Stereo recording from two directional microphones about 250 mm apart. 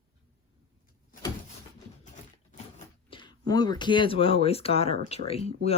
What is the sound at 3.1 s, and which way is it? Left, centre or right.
Speech, centre.